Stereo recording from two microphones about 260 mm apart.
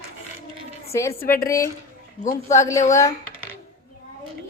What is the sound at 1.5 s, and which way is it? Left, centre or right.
A woman's voice, centre.